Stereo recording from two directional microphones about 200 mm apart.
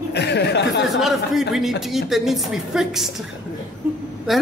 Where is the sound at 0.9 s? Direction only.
Centre (ahead or behind).